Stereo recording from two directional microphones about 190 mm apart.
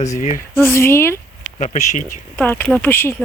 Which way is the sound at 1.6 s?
40° left (ahead or behind).